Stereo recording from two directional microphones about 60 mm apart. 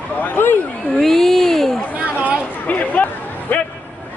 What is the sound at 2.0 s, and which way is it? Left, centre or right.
Chatter, right.